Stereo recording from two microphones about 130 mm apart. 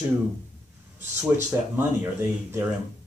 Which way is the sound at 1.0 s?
65° right (ahead or behind).